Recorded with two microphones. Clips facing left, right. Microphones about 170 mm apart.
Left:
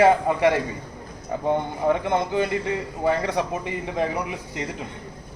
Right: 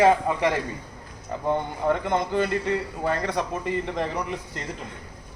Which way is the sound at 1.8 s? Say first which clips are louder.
Left 2 dB; 10° left (ahead or behind).